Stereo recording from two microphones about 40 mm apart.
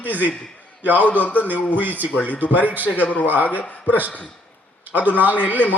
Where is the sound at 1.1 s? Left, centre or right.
Left.